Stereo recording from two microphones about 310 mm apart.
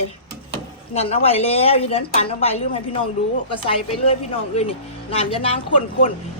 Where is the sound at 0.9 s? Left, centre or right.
Centre.